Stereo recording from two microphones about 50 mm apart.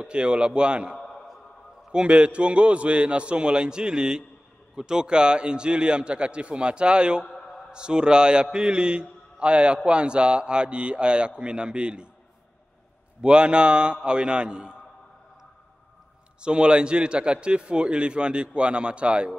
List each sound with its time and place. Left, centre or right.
0.0 s a man's voice: right
0.9 s a sound: centre
1.9 s a man's voice: right
7.2 s a sound: centre
7.7 s a man's voice: centre
13.2 s a man's voice: right
16.3 s a man's voice: centre